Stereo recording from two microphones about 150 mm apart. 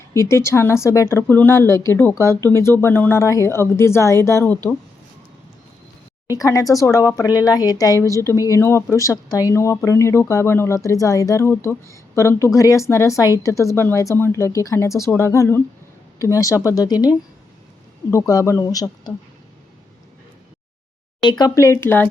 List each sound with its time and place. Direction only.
0.1 s speech: 20° left (ahead or behind)
6.3 s speech: 20° left (ahead or behind)
21.2 s speech: 30° left (ahead or behind)